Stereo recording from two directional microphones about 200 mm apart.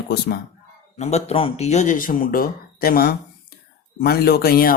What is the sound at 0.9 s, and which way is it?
Speech, 35° left (ahead or behind).